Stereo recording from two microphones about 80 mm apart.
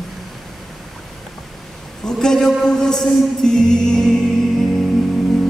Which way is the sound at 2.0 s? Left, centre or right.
Centre.